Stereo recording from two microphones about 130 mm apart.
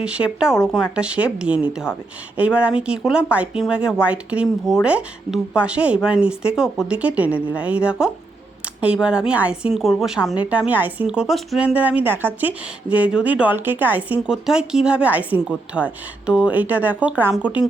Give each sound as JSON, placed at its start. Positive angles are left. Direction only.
{"t": 0.0, "sound": "a woman's voice", "side_deg": -10}